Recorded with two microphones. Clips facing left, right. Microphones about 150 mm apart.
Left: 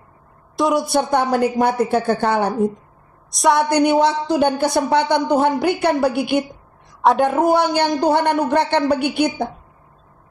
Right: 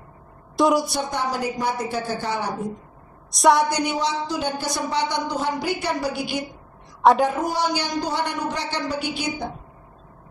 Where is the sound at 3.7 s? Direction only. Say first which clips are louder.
Left 9 dB; 55° left (ahead or behind).